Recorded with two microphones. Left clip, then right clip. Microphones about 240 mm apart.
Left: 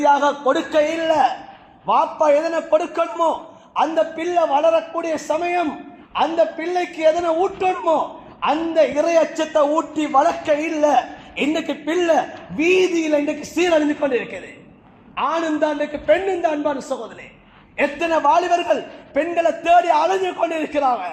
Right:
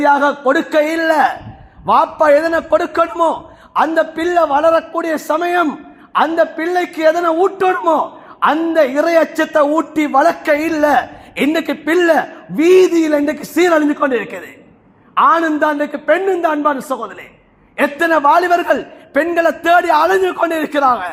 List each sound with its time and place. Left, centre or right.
0.0 s a man's voice: right